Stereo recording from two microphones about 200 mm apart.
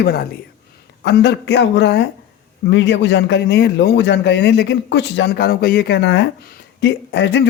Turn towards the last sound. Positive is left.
turn(degrees=60)  # may be behind; listen again after turning